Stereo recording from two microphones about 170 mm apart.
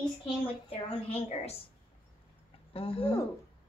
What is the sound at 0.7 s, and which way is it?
Speech, 35° left (ahead or behind).